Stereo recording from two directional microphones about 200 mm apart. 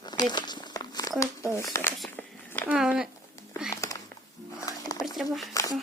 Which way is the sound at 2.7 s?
5° right (ahead or behind).